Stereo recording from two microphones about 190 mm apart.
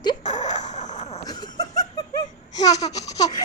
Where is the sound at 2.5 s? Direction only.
20° left (ahead or behind).